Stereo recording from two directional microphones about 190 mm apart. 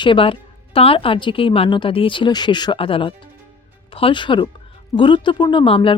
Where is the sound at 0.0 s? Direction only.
25° left (ahead or behind).